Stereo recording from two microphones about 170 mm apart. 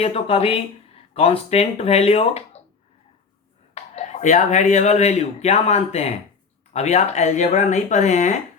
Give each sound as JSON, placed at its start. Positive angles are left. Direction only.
{"t": 0.0, "sound": "speech", "side_deg": 35}
{"t": 3.8, "sound": "speech", "side_deg": 40}